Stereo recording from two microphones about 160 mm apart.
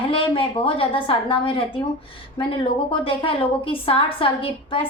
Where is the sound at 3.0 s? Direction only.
35° left (ahead or behind).